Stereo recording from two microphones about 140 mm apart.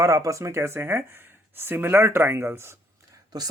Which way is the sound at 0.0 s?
25° right (ahead or behind).